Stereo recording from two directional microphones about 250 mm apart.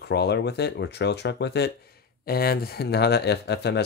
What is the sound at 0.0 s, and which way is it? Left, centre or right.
Speech, left.